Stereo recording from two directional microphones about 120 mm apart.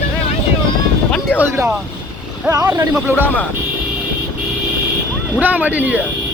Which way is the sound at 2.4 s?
30° right (ahead or behind).